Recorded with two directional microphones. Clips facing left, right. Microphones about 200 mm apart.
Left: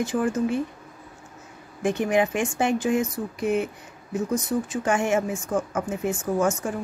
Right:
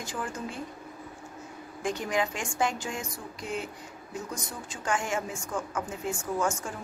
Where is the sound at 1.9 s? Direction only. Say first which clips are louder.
Left 8 dB; 60° left (ahead or behind).